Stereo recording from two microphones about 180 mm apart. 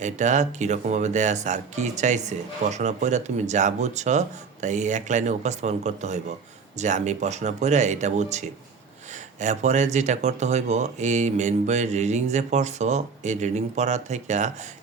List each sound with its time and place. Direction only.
0.0 s speech: 40° right (ahead or behind)